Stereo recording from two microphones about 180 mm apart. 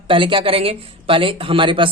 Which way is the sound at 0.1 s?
30° right (ahead or behind).